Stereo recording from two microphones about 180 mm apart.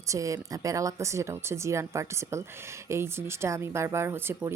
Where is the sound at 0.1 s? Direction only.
15° right (ahead or behind).